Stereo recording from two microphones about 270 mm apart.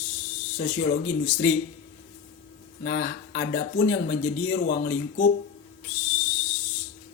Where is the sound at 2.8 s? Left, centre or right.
Left.